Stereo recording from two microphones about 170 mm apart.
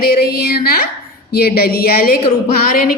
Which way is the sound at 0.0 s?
60° left (ahead or behind).